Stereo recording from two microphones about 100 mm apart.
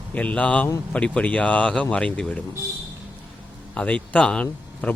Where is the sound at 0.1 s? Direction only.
15° left (ahead or behind).